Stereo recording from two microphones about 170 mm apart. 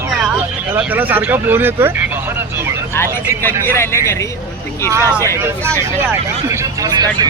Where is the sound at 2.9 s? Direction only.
15° left (ahead or behind).